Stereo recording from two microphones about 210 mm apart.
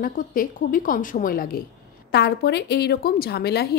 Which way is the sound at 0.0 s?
40° left (ahead or behind).